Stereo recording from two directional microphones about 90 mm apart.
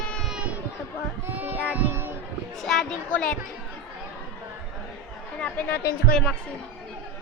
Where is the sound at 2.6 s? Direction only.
5° left (ahead or behind).